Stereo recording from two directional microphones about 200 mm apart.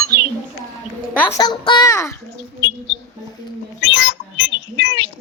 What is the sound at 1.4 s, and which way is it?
Speech, 20° left (ahead or behind).